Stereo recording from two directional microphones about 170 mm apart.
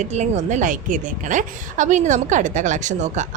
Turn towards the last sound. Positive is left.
turn(degrees=-45)  # may be behind; listen again after turning